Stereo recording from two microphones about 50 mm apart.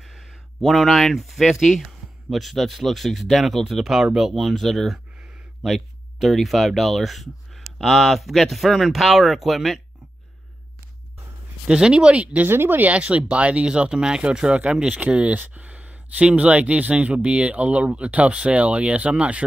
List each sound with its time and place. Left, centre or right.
0.0 s speech: centre
11.6 s speech: centre
12.4 s speech: right
12.9 s speech: right